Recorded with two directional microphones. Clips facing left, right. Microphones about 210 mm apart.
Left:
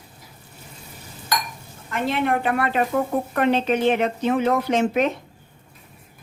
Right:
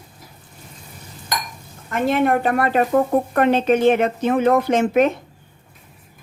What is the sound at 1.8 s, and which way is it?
A woman's voice, 45° right (ahead or behind).